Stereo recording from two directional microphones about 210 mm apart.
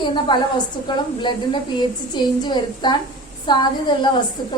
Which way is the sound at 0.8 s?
20° left (ahead or behind).